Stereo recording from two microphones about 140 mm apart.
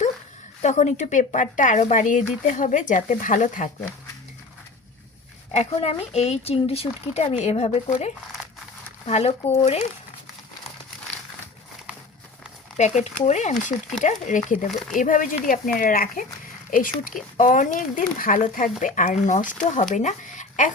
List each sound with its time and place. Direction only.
0.6 s speech: 55° left (ahead or behind)
5.5 s speech: 45° left (ahead or behind)
12.7 s speech: 55° left (ahead or behind)